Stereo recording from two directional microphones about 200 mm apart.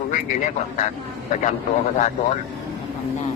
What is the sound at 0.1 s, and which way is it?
Speech, 40° left (ahead or behind).